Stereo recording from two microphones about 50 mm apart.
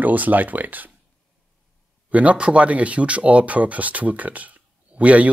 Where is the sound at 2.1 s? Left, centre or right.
Right.